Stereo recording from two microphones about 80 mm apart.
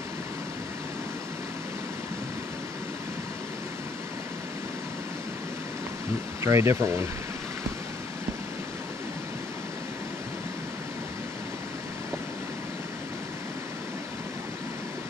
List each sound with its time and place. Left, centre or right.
6.4 s speech: right